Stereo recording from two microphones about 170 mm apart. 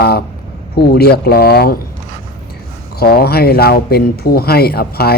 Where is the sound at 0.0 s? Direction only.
70° left (ahead or behind).